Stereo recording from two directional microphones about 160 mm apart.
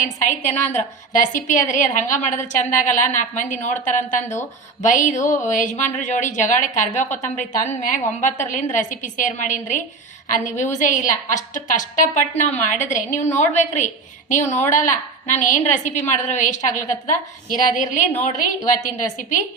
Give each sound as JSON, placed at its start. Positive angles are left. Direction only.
{"t": 0.0, "sound": "a woman's voice", "side_deg": 50}
{"t": 19.1, "sound": "a woman's voice", "side_deg": 50}